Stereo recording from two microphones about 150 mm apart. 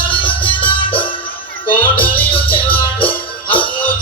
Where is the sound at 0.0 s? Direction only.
35° left (ahead or behind).